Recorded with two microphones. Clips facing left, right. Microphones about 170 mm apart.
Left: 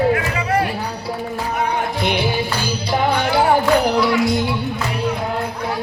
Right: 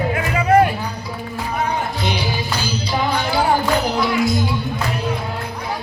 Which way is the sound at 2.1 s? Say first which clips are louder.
Left 3 dB; 55° left (ahead or behind).